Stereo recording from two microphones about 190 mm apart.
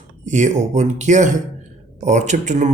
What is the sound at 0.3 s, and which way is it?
Speech, 40° right (ahead or behind).